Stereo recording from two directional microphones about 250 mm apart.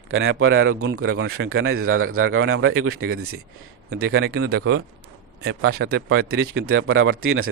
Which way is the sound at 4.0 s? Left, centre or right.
Right.